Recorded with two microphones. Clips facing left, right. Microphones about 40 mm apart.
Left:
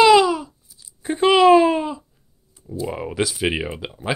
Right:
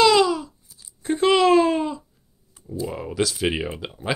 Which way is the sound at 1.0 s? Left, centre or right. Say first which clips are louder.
Left 4 dB; centre.